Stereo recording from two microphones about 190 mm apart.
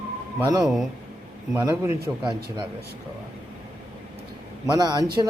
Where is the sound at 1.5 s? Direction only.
15° right (ahead or behind).